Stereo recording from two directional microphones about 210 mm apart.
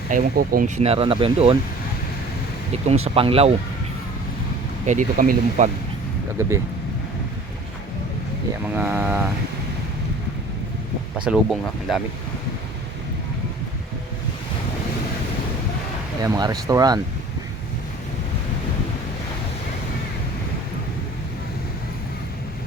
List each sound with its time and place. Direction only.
0.1 s speech: 40° right (ahead or behind)
0.8 s speech: 25° right (ahead or behind)
2.8 s speech: 30° right (ahead or behind)
4.9 s speech: 40° right (ahead or behind)
8.6 s speech: 10° right (ahead or behind)
11.3 s speech: centre (ahead or behind)
16.2 s speech: 20° right (ahead or behind)